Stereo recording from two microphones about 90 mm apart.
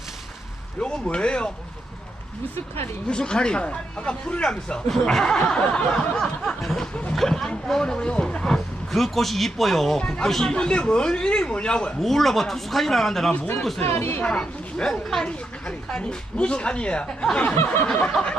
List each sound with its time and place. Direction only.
0.8 s speech: 10° left (ahead or behind)
3.1 s speech: 10° left (ahead or behind)
13.8 s speech: 25° left (ahead or behind)
14.3 s speech: 10° left (ahead or behind)